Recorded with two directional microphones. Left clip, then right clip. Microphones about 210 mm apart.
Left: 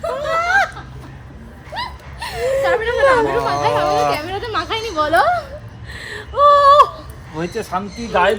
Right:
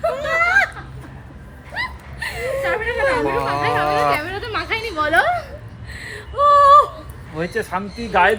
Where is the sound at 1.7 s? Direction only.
20° left (ahead or behind).